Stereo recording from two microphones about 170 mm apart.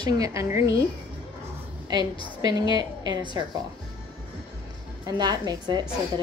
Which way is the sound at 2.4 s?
25° right (ahead or behind).